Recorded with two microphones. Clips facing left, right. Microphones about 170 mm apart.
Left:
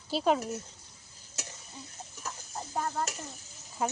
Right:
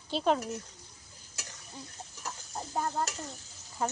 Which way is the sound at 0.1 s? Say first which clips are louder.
Left 1 dB; 5° left (ahead or behind).